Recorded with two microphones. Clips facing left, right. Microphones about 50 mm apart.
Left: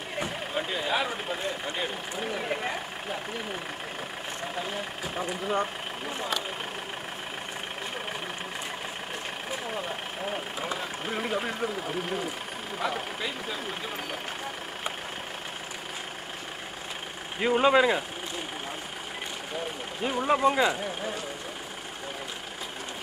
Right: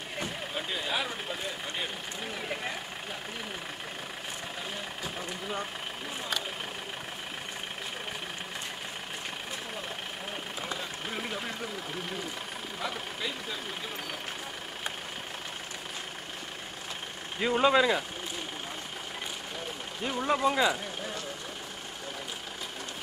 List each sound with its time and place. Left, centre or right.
0.2 s vehicle: centre
4.6 s speech: centre
9.5 s vehicle: centre
12.7 s speech: centre
17.4 s speech: centre
20.0 s speech: centre